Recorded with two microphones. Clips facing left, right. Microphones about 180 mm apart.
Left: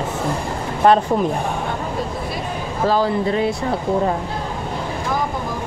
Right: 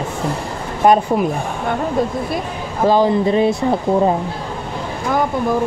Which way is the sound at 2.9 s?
20° right (ahead or behind).